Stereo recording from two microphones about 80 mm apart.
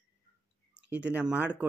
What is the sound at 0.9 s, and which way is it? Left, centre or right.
Speech, centre.